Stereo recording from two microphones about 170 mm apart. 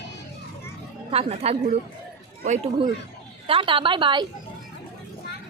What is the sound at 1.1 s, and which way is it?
A woman's voice, 35° right (ahead or behind).